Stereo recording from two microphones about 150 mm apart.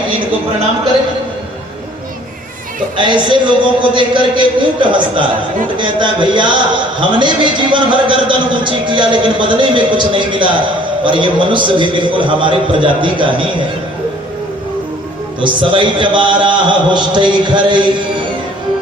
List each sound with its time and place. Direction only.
3.0 s a man's voice: 30° right (ahead or behind)
15.4 s a man's voice: 35° right (ahead or behind)